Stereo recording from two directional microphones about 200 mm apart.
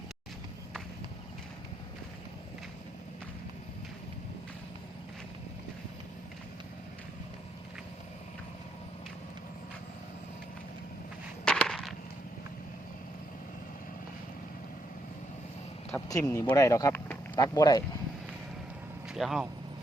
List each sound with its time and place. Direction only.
11.4 s a sound: 5° left (ahead or behind)
16.0 s speech: 15° left (ahead or behind)
19.1 s speech: centre (ahead or behind)